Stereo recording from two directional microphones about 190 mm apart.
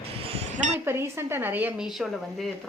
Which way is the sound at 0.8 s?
15° right (ahead or behind).